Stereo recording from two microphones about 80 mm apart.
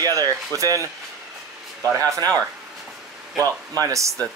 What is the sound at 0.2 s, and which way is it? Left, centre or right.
Speech, right.